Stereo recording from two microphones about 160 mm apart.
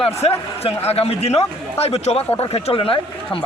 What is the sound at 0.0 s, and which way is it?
A man's voice, 40° left (ahead or behind).